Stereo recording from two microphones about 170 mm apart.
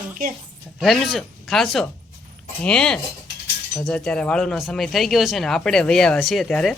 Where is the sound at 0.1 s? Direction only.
55° right (ahead or behind).